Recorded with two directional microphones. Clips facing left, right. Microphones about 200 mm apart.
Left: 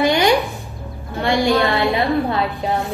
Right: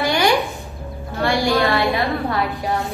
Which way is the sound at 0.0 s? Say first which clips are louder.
Left 3 dB; 20° left (ahead or behind).